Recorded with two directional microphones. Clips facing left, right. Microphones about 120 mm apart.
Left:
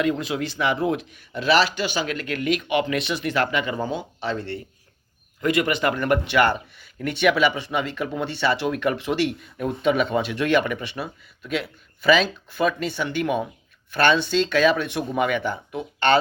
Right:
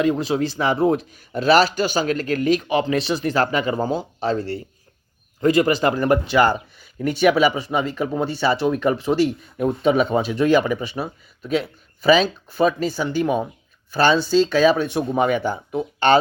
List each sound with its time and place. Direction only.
0.0 s a man's voice: 30° right (ahead or behind)